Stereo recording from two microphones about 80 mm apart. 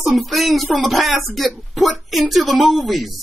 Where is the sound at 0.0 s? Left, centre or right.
Centre.